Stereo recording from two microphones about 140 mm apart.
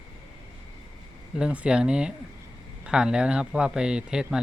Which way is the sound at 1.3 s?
5° right (ahead or behind).